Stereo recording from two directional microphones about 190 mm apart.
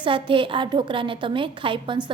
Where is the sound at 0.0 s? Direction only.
25° right (ahead or behind).